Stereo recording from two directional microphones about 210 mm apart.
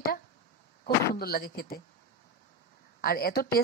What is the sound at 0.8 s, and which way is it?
Speech, 45° left (ahead or behind).